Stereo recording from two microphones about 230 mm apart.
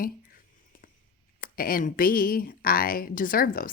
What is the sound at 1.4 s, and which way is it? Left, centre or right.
Speech, left.